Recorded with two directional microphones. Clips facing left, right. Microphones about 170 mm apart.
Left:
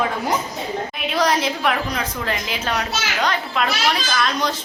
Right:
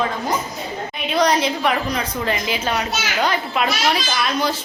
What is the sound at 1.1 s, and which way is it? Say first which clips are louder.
A woman's voice: right 2 dB; centre (ahead or behind).